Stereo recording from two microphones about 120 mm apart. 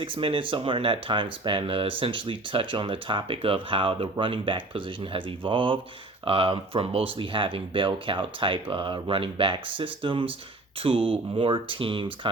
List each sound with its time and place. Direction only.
0.0 s speech: 50° right (ahead or behind)